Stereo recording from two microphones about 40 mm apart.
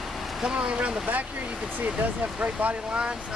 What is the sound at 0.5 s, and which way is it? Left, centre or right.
Speech, right.